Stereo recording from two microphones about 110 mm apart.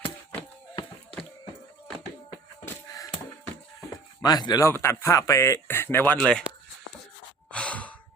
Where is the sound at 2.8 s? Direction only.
30° left (ahead or behind).